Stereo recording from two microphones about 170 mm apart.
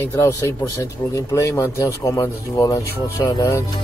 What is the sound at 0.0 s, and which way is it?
Speech, 15° left (ahead or behind).